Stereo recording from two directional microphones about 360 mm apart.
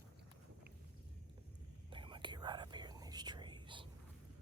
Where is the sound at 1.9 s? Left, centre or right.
Centre.